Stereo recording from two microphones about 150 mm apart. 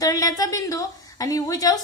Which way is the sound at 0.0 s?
25° left (ahead or behind).